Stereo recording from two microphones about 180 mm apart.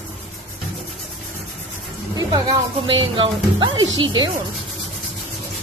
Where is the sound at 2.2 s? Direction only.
25° right (ahead or behind).